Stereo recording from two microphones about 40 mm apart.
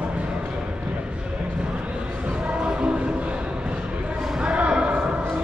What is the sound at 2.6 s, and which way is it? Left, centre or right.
Music, right.